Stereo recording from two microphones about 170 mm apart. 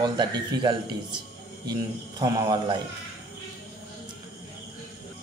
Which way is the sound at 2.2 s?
25° right (ahead or behind).